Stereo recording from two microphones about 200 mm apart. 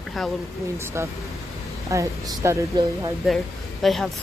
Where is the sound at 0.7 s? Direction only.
15° right (ahead or behind).